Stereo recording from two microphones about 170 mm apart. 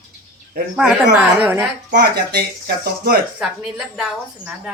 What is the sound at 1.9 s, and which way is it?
Speech, 70° right (ahead or behind).